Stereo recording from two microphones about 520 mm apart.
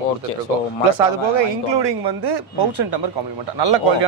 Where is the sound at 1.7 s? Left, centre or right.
Right.